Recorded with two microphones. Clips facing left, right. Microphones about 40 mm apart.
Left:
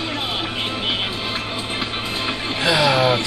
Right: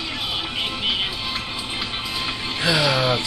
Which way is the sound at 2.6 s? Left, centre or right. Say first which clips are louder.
Left 3 dB; centre.